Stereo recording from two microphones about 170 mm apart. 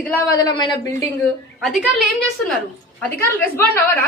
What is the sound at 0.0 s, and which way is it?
A woman's voice, 20° left (ahead or behind).